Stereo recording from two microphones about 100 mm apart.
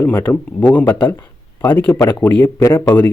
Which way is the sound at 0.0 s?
20° left (ahead or behind).